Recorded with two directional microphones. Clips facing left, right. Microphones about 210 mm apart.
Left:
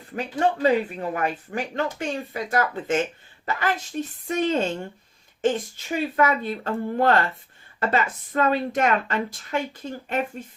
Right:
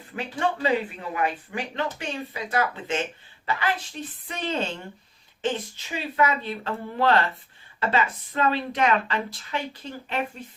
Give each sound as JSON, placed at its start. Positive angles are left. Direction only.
{"t": 0.2, "sound": "speech", "side_deg": 40}